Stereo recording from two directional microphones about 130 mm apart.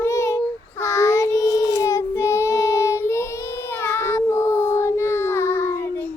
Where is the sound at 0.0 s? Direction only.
20° left (ahead or behind).